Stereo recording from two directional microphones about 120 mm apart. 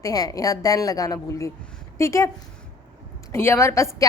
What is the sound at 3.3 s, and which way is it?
Speech, 20° left (ahead or behind).